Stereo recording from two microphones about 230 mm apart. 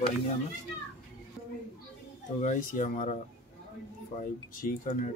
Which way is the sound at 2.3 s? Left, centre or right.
Left.